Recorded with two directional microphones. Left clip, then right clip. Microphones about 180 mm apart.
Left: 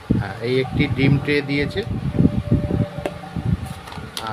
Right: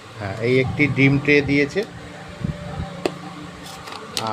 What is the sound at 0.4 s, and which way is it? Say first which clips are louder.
Speech: right 3 dB; centre (ahead or behind).